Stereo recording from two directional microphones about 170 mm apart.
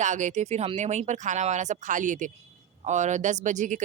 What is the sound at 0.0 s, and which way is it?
Speech, 45° right (ahead or behind).